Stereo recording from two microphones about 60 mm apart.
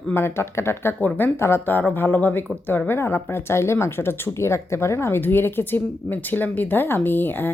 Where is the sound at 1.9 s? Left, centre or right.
Left.